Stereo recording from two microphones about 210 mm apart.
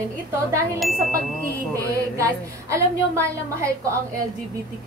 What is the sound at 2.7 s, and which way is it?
A woman's voice, 15° right (ahead or behind).